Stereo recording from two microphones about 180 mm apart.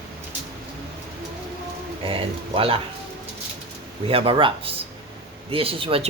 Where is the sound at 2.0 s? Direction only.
30° right (ahead or behind).